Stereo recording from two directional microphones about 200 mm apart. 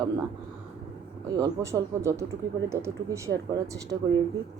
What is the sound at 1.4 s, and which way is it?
Speech, 15° right (ahead or behind).